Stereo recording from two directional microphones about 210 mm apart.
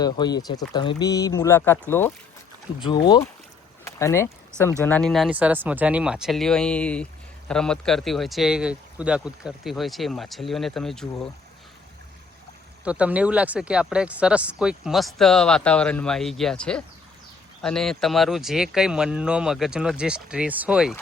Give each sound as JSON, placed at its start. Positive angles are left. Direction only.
{"t": 0.0, "sound": "speech", "side_deg": 20}
{"t": 2.8, "sound": "speech", "side_deg": 20}
{"t": 12.8, "sound": "speech", "side_deg": -5}